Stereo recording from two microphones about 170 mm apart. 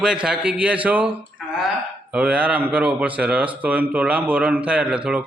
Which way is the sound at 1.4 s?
Centre (ahead or behind).